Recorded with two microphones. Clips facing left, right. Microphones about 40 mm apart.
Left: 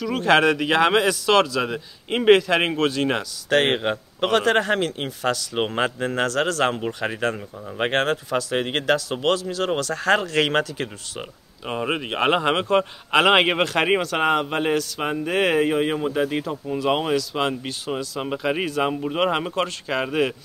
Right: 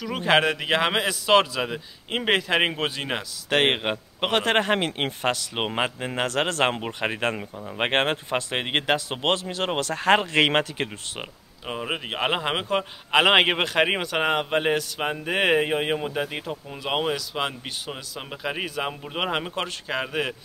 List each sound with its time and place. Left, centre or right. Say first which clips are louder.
0.0 s a man's voice: left 3 dB; centre
1.7 s speech: left 3 dB; centre
2.3 s a man's voice: left 3 dB; centre
6.4 s speech: left 2 dB; right
11.6 s a man's voice: left 4 dB; centre
18.2 s speech: left 5 dB; centre